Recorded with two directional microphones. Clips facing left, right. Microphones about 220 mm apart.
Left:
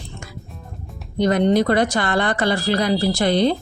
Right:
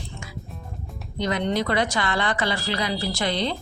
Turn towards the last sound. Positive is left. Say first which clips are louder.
# left 8 dB
turn(degrees=50)  # may be behind; listen again after turning